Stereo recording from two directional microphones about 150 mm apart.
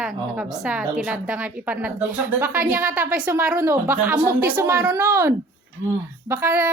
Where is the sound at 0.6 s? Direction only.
5° right (ahead or behind).